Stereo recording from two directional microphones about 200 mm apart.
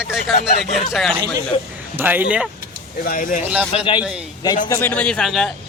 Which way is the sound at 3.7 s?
25° left (ahead or behind).